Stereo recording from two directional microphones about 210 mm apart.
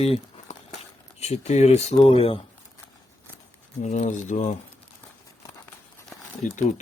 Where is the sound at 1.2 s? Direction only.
30° left (ahead or behind).